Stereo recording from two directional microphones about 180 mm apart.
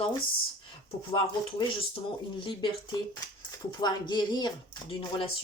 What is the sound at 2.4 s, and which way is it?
Speech, 25° left (ahead or behind).